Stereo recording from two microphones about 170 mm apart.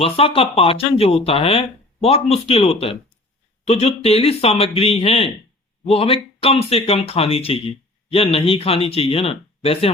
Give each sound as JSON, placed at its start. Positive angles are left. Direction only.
{"t": 0.0, "sound": "speech", "side_deg": 35}